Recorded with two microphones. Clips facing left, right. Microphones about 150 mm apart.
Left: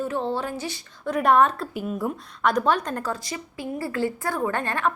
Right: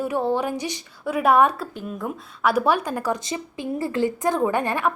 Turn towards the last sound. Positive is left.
turn(degrees=-15)  # may be behind; listen again after turning